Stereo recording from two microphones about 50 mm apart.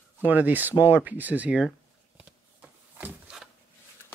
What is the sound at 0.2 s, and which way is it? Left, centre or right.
Speech, right.